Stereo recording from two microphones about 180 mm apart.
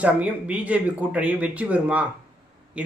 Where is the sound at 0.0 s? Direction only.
10° right (ahead or behind).